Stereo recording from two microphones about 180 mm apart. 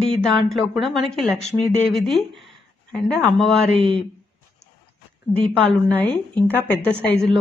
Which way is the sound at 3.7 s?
30° right (ahead or behind).